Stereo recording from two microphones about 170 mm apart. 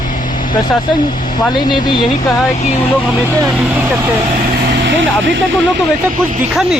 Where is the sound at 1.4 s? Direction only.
25° left (ahead or behind).